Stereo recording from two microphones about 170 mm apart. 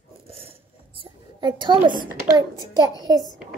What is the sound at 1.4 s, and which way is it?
A child's voice, 25° right (ahead or behind).